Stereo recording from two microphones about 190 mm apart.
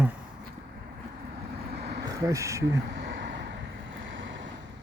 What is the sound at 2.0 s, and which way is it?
Speech, 15° right (ahead or behind).